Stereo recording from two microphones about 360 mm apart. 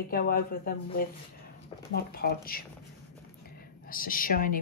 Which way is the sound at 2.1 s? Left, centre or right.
Left.